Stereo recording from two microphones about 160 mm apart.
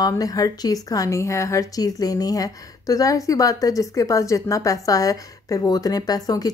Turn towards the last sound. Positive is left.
turn(degrees=25)  # may be behind; listen again after turning